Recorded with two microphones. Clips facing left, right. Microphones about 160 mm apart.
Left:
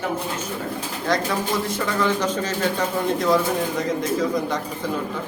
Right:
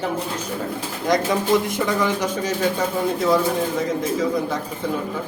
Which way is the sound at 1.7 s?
15° right (ahead or behind).